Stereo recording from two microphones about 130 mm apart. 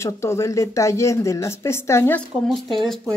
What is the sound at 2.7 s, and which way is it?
Speech, centre (ahead or behind).